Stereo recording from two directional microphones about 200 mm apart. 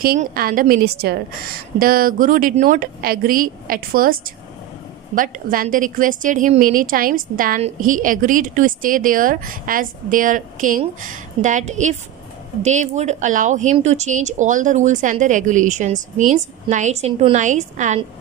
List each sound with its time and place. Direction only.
0.0 s a woman's voice: 45° right (ahead or behind)